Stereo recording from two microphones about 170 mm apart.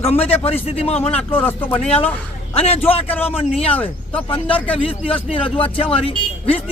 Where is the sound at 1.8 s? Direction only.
35° left (ahead or behind).